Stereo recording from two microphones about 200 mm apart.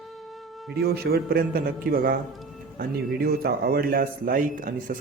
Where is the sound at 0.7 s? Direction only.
50° right (ahead or behind).